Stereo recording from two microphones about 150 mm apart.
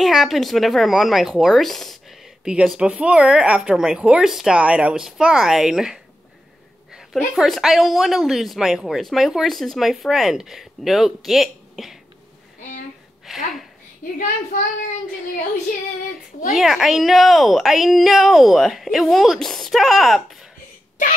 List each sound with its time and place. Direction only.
0.0 s speech: centre (ahead or behind)
6.9 s a sound: 5° right (ahead or behind)
7.3 s speech: centre (ahead or behind)
13.2 s speech: centre (ahead or behind)
14.1 s speech: 60° left (ahead or behind)
16.5 s speech: centre (ahead or behind)
21.0 s speech: 60° left (ahead or behind)